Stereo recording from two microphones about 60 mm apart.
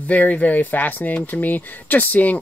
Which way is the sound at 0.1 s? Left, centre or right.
Left.